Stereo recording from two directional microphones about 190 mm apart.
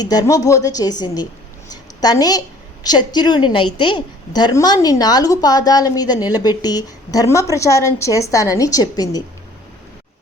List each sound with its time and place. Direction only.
0.0 s a woman's voice: 20° left (ahead or behind)